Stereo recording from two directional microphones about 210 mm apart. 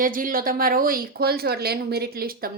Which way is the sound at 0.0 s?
40° right (ahead or behind).